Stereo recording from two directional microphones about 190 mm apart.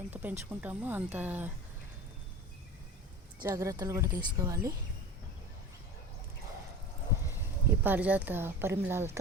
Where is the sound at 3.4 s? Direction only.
20° right (ahead or behind).